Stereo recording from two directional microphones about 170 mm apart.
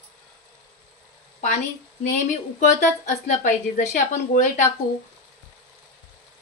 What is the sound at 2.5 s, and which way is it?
A woman's voice, 45° left (ahead or behind).